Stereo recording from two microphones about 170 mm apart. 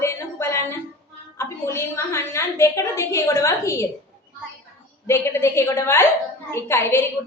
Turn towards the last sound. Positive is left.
turn(degrees=15)  # may be behind; listen again after turning